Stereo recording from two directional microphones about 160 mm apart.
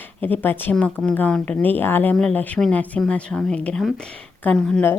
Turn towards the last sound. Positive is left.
turn(degrees=5)  # may be behind; listen again after turning